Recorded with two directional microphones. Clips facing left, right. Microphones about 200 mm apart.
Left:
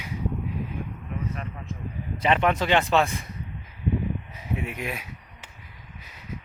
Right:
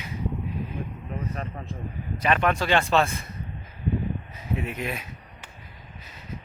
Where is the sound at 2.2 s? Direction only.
20° left (ahead or behind).